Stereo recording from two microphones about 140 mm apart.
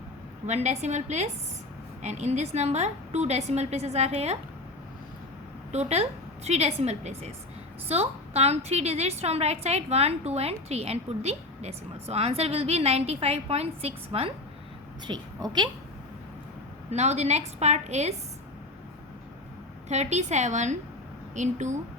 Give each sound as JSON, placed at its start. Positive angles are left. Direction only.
{"t": 0.4, "sound": "a woman's voice", "side_deg": -55}
{"t": 5.7, "sound": "a woman's voice", "side_deg": -50}
{"t": 15.0, "sound": "a woman's voice", "side_deg": -30}
{"t": 16.9, "sound": "a woman's voice", "side_deg": -55}
{"t": 19.9, "sound": "a woman's voice", "side_deg": -55}